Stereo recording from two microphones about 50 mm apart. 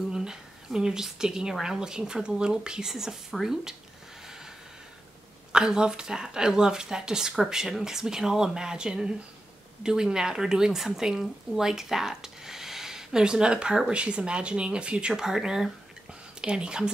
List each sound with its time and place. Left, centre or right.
0.1 s speech: centre
5.5 s speech: centre